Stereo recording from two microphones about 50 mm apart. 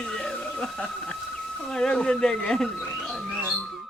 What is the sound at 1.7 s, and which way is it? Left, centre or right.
Speech, centre.